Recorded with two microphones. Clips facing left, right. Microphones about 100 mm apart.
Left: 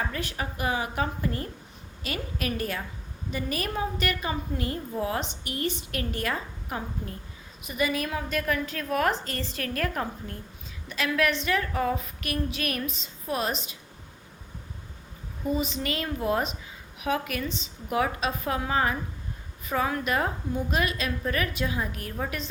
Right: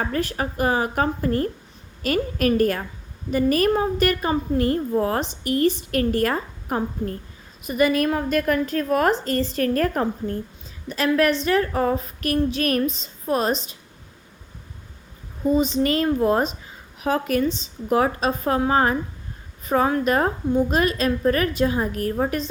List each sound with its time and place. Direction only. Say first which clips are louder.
0.0 s a woman's voice: right 7 dB; 45° right (ahead or behind)
7.7 s female singing: right 9 dB; 50° right (ahead or behind); by 13.7 s 35° right (ahead or behind)
15.5 s female singing: right 11 dB; 35° right (ahead or behind)